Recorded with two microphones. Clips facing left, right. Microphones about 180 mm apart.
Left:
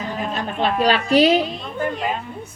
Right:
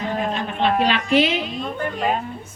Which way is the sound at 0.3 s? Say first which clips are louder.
Left 1 dB; 40° left (ahead or behind).